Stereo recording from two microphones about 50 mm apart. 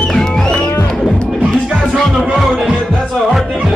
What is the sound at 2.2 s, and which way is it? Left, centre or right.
Music, centre.